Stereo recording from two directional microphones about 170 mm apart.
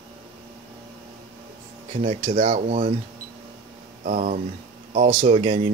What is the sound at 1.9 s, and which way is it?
Speech, 35° right (ahead or behind).